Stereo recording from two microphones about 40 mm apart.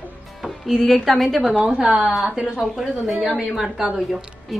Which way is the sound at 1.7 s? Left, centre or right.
Right.